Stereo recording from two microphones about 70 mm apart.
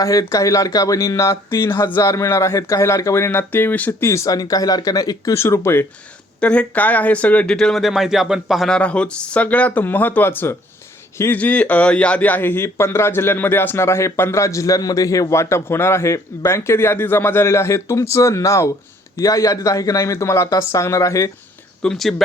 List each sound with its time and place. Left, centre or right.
0.0 s speech: left
4.0 s speech: left
4.3 s a man's voice: left
5.4 s a man's voice: left
6.4 s speech: centre
7.4 s speech: centre
8.7 s speech: centre; by 10.6 s left
11.3 s a man's voice: left
21.8 s speech: centre